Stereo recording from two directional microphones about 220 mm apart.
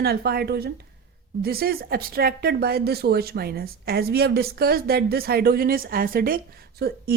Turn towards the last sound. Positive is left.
turn(degrees=-45)  # may be behind; listen again after turning